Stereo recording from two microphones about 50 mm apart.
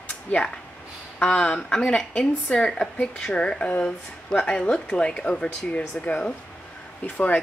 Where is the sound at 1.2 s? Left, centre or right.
Left.